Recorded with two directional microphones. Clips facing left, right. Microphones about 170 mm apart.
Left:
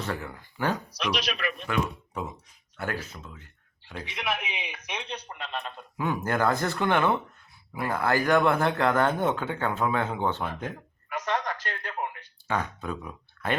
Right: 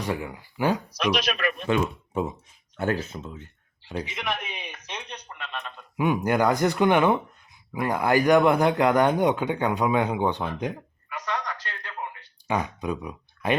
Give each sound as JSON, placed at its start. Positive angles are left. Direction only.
{"t": 0.0, "sound": "a man's voice", "side_deg": -15}
{"t": 0.9, "sound": "speech", "side_deg": -50}
{"t": 1.6, "sound": "speech", "side_deg": -25}
{"t": 4.0, "sound": "speech", "side_deg": 0}
{"t": 5.0, "sound": "speech", "side_deg": 35}
{"t": 6.0, "sound": "a man's voice", "side_deg": -15}
{"t": 11.1, "sound": "a sound", "side_deg": 40}
{"t": 12.5, "sound": "speech", "side_deg": -15}